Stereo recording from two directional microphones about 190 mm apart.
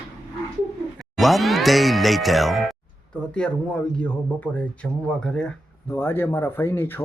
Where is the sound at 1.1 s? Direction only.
Centre (ahead or behind).